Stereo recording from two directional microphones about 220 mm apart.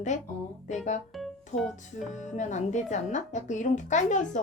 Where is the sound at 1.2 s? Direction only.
Centre (ahead or behind).